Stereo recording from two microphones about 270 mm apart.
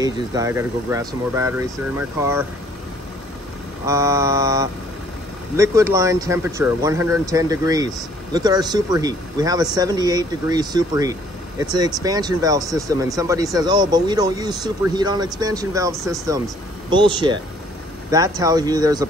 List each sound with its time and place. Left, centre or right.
0.0 s speech: centre
3.8 s speech: centre